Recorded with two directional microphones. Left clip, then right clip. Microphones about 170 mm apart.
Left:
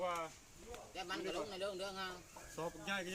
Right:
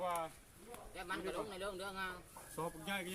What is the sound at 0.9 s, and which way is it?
Speech, 40° left (ahead or behind).